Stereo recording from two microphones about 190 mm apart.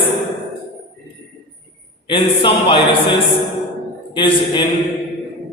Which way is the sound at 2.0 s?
25° left (ahead or behind).